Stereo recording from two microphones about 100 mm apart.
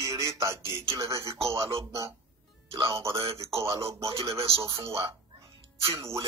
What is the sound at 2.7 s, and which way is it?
Speech, 60° right (ahead or behind).